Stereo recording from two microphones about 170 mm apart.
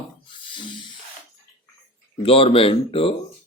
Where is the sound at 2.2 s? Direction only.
35° left (ahead or behind).